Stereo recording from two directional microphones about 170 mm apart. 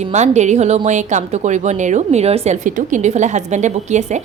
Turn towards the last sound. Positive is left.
turn(degrees=-45)  # may be behind; listen again after turning